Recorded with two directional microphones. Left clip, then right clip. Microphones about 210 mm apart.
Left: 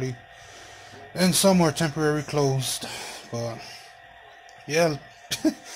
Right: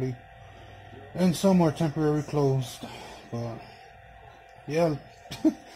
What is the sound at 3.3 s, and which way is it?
Speech, 25° left (ahead or behind).